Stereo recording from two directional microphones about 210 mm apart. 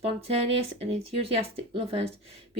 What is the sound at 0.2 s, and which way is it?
Speech, 30° right (ahead or behind).